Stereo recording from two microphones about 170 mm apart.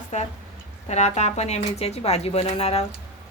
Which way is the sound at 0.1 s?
45° left (ahead or behind).